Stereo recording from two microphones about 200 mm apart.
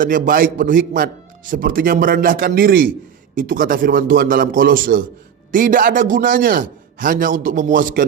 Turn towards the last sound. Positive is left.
turn(degrees=-40)  # may be behind; listen again after turning